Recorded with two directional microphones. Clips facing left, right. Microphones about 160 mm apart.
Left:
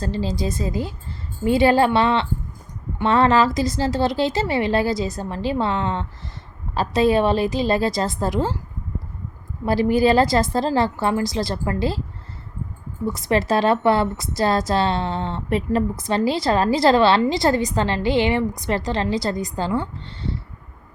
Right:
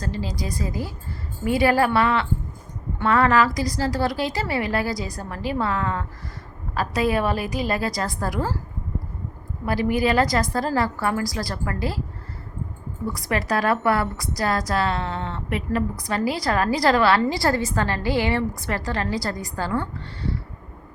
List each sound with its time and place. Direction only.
0.0 s a woman's voice: 30° left (ahead or behind)
9.6 s a woman's voice: 30° left (ahead or behind)
13.1 s a woman's voice: 25° left (ahead or behind)